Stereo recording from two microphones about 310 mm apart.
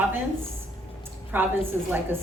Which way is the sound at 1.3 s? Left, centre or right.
Centre.